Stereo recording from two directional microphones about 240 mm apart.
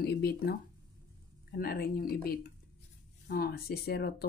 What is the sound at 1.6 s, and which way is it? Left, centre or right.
A woman's voice, left.